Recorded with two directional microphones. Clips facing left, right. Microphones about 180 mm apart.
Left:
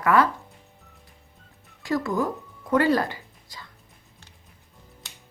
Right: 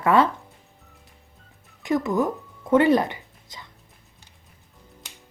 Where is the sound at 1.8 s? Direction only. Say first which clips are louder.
Right 3 dB; 20° right (ahead or behind).